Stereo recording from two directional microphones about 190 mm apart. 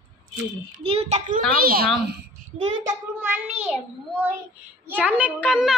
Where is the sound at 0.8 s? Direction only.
30° right (ahead or behind).